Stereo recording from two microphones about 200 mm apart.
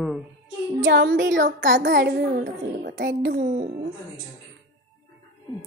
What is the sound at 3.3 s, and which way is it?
Speech, 40° right (ahead or behind).